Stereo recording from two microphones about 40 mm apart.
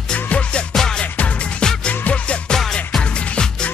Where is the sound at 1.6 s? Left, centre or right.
Left.